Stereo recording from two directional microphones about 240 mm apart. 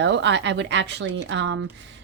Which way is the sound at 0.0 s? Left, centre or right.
Right.